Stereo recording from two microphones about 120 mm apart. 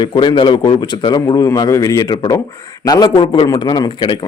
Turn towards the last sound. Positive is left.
turn(degrees=35)  # may be behind; listen again after turning